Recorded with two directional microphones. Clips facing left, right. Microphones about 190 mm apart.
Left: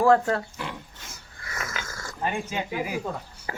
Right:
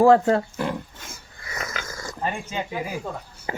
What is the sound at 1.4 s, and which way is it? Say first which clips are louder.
Snoring: right 2 dB; 20° right (ahead or behind).